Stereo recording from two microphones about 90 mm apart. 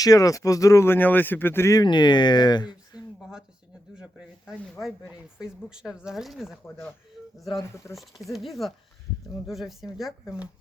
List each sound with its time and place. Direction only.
0.0 s speech: 40° left (ahead or behind)
0.9 s speech: 20° left (ahead or behind)
1.7 s speech: 55° left (ahead or behind)
3.9 s a sound: 10° right (ahead or behind)
5.0 s speech: 10° right (ahead or behind)